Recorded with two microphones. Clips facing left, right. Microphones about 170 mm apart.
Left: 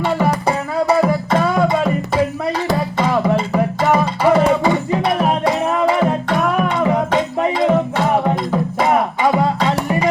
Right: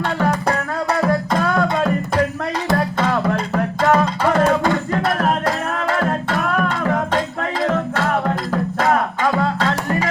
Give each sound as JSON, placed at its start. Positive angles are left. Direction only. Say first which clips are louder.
{"t": 0.2, "sound": "music", "louder": "left 2 dB", "side_deg": 5}